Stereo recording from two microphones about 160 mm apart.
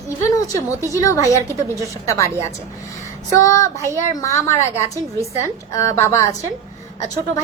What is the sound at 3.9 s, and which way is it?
A woman's voice, 20° left (ahead or behind).